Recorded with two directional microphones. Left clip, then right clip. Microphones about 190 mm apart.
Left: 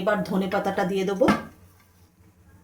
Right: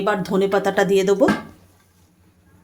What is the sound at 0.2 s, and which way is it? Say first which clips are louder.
Speech: right 7 dB; 55° right (ahead or behind).